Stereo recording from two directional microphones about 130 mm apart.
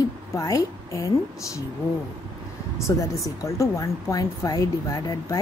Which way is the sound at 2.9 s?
25° left (ahead or behind).